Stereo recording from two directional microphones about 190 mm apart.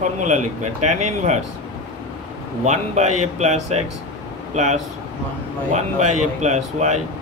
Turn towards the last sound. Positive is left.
turn(degrees=-35)  # may be behind; listen again after turning